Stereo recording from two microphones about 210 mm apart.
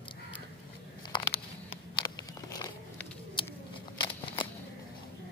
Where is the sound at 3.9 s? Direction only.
20° left (ahead or behind).